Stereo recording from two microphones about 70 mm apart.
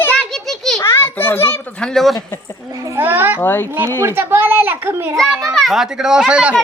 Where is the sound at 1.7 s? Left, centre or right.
Centre.